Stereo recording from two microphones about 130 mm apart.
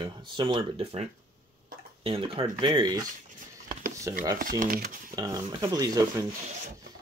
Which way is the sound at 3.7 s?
90° right.